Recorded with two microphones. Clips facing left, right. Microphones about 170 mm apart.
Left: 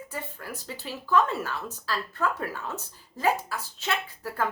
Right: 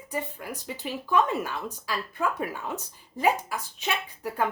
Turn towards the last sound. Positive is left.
turn(degrees=-15)  # may be behind; listen again after turning